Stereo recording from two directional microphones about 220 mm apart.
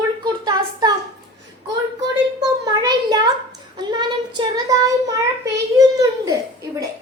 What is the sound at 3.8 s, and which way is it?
Child singing, 20° right (ahead or behind).